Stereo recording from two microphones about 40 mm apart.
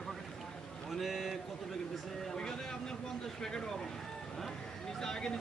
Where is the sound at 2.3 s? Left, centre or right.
Centre.